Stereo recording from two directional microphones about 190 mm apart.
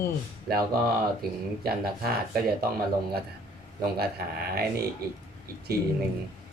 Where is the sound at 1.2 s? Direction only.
55° right (ahead or behind).